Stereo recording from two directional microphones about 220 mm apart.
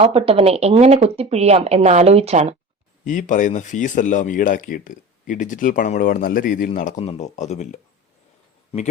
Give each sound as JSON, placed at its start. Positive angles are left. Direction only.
{"t": 0.0, "sound": "speech", "side_deg": -25}
{"t": 3.0, "sound": "speech", "side_deg": 35}